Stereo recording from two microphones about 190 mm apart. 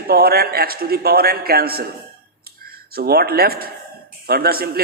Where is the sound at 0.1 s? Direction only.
55° right (ahead or behind).